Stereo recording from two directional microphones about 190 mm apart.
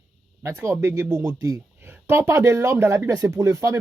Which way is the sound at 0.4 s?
10° right (ahead or behind).